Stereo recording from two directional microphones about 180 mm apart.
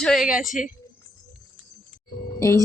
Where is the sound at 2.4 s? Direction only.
15° left (ahead or behind).